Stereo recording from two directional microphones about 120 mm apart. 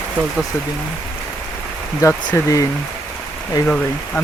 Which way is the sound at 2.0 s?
25° left (ahead or behind).